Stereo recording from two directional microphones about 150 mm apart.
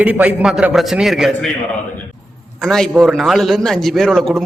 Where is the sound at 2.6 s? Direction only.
Centre (ahead or behind).